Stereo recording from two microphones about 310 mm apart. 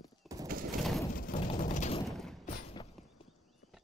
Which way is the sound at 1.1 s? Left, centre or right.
Left.